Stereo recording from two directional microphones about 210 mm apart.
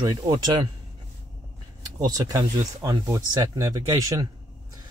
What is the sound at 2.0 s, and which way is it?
Speech, 15° right (ahead or behind).